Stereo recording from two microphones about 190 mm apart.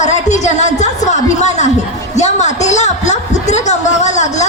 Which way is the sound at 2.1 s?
40° left (ahead or behind).